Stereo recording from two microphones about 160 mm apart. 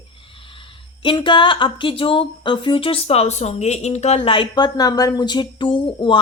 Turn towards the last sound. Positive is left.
turn(degrees=30)  # may be behind; listen again after turning